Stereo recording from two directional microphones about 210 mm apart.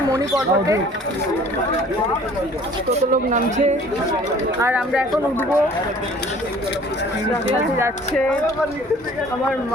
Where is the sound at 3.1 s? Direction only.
35° right (ahead or behind).